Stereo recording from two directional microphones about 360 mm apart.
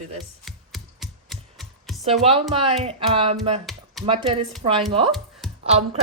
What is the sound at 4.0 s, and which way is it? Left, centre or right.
Speech, centre.